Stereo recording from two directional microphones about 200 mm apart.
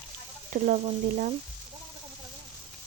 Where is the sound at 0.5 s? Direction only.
40° right (ahead or behind).